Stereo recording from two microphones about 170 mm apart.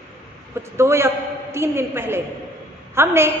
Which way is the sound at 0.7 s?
15° right (ahead or behind).